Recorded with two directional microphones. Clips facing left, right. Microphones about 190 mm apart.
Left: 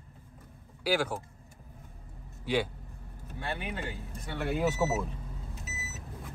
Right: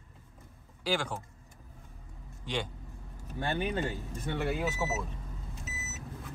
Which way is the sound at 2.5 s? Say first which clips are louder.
Left 6 dB; 5° left (ahead or behind).